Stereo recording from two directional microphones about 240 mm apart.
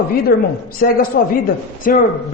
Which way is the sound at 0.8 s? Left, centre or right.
Left.